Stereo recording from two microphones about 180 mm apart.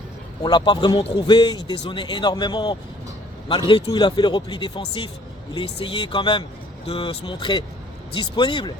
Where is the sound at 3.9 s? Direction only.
25° left (ahead or behind).